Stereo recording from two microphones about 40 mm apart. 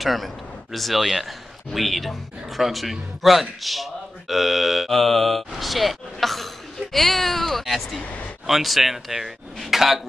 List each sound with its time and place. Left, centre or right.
0.0 s a man's voice: centre
8.0 s speech: left
8.5 s a man's voice: centre